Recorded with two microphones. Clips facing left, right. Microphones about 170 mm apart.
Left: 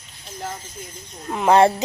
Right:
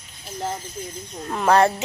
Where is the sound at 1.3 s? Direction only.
15° left (ahead or behind).